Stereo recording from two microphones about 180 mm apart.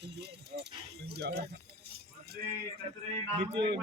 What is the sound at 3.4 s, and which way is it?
Speech, 30° right (ahead or behind).